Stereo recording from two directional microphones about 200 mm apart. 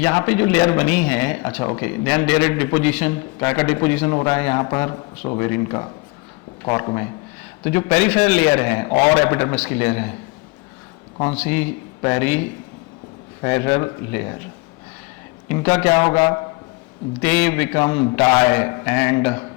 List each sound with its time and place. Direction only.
0.0 s speech: 10° left (ahead or behind)
11.3 s speech: 10° left (ahead or behind)
15.4 s speech: 10° left (ahead or behind)